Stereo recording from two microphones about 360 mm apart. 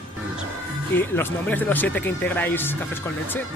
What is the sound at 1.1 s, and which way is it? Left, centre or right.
Speech, centre.